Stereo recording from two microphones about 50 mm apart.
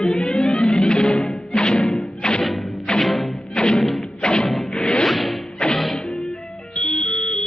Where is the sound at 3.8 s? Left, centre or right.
Centre.